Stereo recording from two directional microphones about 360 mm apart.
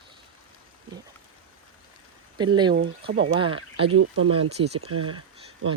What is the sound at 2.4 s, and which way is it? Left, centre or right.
Speech, centre.